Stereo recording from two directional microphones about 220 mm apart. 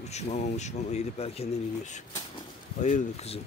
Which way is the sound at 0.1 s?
30° left (ahead or behind).